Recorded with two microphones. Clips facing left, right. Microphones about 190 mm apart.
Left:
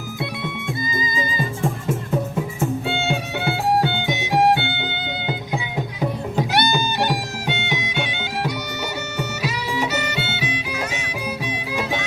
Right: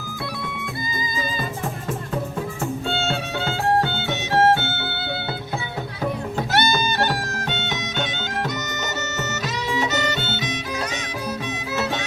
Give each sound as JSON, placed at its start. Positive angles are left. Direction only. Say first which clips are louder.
{"t": 0.9, "sound": "music", "louder": "left 1 dB", "side_deg": 20}
{"t": 2.6, "sound": "music", "louder": "left 2 dB", "side_deg": 15}
{"t": 6.0, "sound": "music", "louder": "left 2 dB", "side_deg": 15}
{"t": 9.4, "sound": "music", "louder": "even", "side_deg": 10}